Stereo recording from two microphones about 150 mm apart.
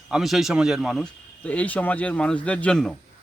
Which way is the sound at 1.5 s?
10° left (ahead or behind).